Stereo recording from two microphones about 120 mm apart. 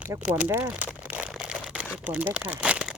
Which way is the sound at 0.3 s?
15° right (ahead or behind).